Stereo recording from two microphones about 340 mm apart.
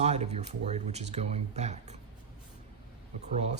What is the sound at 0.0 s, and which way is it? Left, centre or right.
Speech, centre.